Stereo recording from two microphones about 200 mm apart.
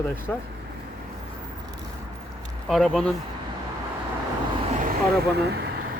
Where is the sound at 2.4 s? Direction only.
Centre (ahead or behind).